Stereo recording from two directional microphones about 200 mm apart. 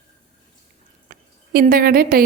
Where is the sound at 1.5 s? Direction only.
45° right (ahead or behind).